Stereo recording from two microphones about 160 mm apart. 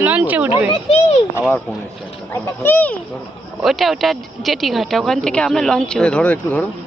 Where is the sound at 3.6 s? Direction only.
Centre (ahead or behind).